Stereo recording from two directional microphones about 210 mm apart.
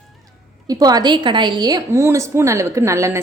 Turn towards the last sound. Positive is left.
turn(degrees=-15)  # may be behind; listen again after turning